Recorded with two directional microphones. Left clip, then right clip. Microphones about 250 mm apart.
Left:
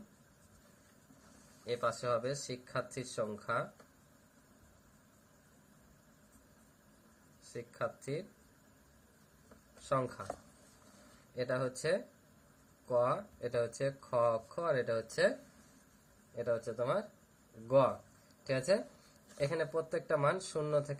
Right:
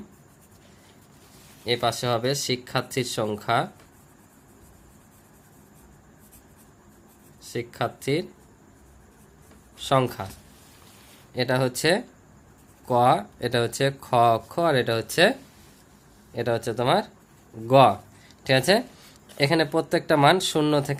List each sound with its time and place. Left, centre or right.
1.6 s speech: right
7.5 s speech: right
9.9 s speech: right
11.3 s speech: right
16.3 s speech: right